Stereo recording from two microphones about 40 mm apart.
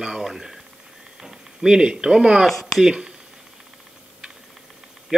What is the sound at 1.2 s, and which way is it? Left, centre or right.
Speech, centre.